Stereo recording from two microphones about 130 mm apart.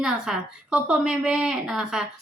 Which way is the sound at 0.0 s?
5° right (ahead or behind).